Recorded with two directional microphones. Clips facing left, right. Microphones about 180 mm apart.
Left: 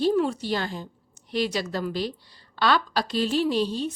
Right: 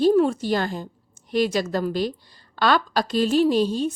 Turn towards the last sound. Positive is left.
turn(degrees=-45)  # may be behind; listen again after turning